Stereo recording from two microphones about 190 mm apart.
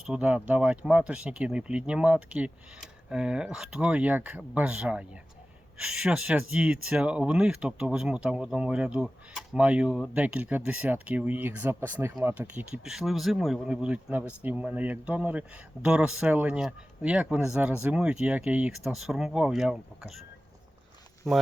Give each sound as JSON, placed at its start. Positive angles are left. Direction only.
{"t": 0.0, "sound": "speech", "side_deg": -5}
{"t": 21.2, "sound": "speech", "side_deg": 0}